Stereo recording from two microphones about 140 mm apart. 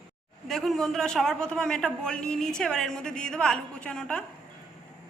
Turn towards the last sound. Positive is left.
turn(degrees=5)  # may be behind; listen again after turning